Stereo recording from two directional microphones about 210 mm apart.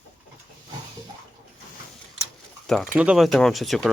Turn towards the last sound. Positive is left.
turn(degrees=0)  # may be behind; listen again after turning